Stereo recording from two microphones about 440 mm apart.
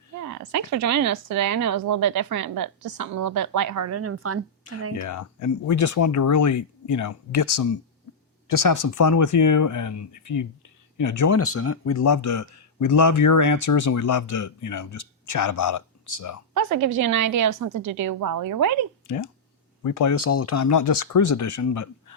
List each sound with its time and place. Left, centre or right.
0.2 s a woman's voice: right
5.0 s a man's voice: left
16.6 s a woman's voice: right
19.0 s speech: left